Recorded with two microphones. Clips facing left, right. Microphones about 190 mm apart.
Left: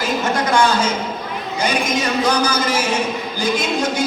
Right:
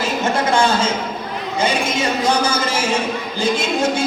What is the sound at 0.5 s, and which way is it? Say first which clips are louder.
A man's voice: even; 25° right (ahead or behind).